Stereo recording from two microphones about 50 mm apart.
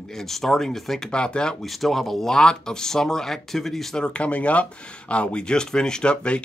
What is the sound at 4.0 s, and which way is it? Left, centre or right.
Speech, left.